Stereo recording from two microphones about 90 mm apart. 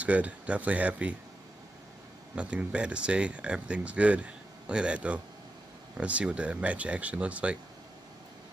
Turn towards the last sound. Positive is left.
turn(degrees=-15)  # may be behind; listen again after turning